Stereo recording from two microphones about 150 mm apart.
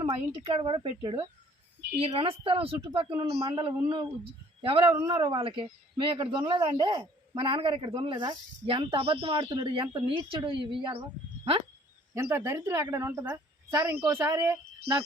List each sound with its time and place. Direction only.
0.0 s speech: 35° right (ahead or behind)
12.1 s speech: 20° right (ahead or behind)